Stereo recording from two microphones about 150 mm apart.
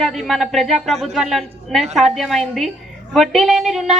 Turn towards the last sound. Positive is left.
turn(degrees=0)  # may be behind; listen again after turning